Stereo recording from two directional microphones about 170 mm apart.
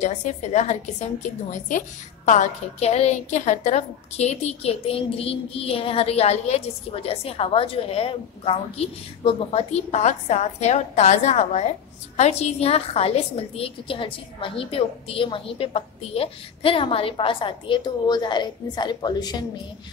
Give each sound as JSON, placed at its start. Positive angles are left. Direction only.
{"t": 0.0, "sound": "a woman's voice", "side_deg": 45}